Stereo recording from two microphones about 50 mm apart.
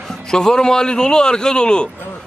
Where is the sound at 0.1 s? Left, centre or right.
Centre.